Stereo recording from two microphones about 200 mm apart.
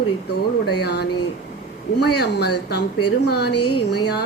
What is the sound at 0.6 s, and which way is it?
A woman's voice, 55° left (ahead or behind).